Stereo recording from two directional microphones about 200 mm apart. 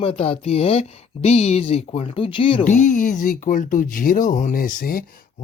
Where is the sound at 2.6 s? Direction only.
40° left (ahead or behind).